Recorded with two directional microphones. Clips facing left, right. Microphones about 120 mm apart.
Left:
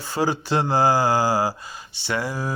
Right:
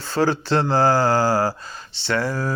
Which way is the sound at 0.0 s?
15° left (ahead or behind).